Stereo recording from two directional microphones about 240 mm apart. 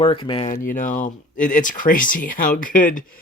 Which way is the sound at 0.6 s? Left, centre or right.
Left.